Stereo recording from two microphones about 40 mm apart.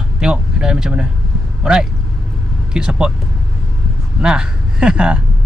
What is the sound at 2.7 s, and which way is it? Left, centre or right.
Speech, centre.